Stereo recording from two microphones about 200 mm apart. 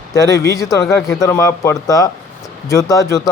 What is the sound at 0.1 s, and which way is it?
Speech, 15° left (ahead or behind).